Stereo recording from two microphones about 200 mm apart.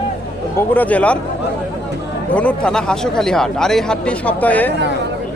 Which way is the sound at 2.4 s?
5° left (ahead or behind).